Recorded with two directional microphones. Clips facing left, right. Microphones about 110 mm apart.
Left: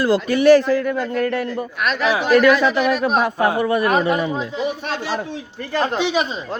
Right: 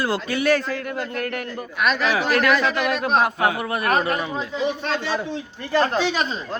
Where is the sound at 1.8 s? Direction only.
Centre (ahead or behind).